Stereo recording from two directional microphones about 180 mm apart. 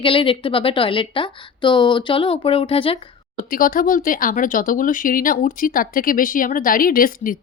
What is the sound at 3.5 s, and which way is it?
Speech, 50° left (ahead or behind).